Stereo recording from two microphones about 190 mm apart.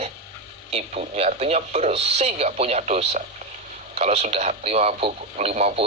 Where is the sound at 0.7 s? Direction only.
35° right (ahead or behind).